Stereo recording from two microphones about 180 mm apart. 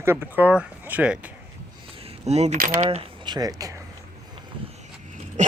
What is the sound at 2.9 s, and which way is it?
Speech, 30° right (ahead or behind).